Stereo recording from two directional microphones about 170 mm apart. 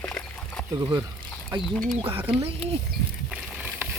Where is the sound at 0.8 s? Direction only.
25° right (ahead or behind).